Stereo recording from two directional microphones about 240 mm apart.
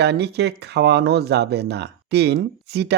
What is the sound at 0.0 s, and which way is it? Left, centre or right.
Speech, right.